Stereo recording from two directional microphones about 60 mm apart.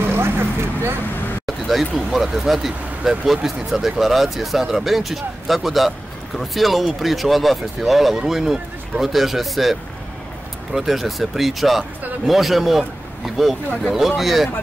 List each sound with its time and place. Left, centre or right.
0.1 s speech: right
1.4 s a sound: centre
2.1 s speech: centre